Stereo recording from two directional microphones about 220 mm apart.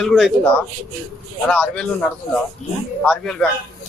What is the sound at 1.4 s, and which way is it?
Speech, 5° left (ahead or behind).